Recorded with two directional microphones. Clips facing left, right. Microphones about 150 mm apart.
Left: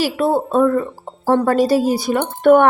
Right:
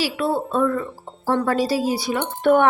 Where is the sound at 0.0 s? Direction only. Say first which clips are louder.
Left 5 dB; 45° left (ahead or behind).